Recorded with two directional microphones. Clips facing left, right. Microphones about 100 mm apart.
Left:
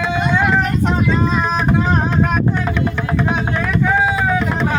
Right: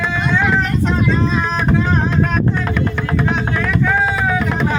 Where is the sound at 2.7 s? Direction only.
Centre (ahead or behind).